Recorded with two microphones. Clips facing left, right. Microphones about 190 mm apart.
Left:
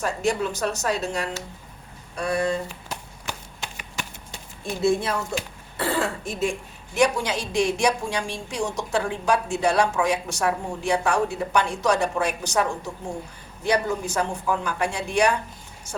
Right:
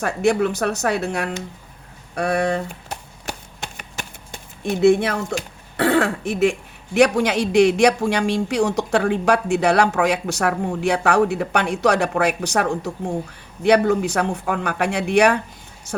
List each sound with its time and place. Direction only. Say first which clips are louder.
0.0 s speech: right 6 dB; 60° right (ahead or behind)
3.6 s a sound: right 2 dB; 50° right (ahead or behind); by 5.2 s 70° right (ahead or behind)
5.7 s speech: right 7 dB; 75° right (ahead or behind)